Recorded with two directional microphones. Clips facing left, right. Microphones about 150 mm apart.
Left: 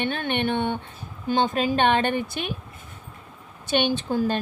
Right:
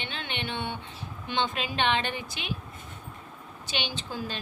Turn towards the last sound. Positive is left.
turn(degrees=50)  # may be behind; listen again after turning